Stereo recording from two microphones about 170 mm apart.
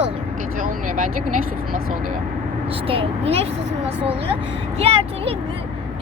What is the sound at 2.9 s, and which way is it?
Speech, 35° right (ahead or behind).